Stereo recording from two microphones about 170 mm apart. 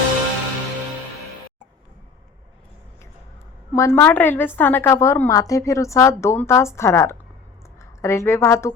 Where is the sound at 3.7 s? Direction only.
15° left (ahead or behind).